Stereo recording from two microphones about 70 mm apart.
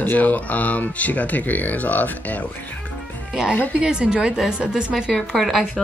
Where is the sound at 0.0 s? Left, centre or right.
Left.